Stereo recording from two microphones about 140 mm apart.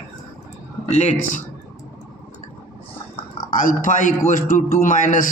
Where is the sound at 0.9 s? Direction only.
55° left (ahead or behind).